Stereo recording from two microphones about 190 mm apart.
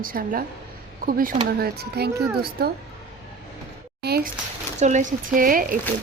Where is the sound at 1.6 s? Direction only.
55° right (ahead or behind).